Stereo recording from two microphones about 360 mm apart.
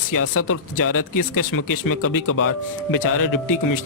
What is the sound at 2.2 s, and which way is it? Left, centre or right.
Speech, left.